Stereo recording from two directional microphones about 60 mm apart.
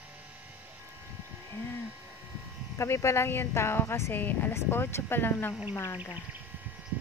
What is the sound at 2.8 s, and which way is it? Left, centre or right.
Speech, left.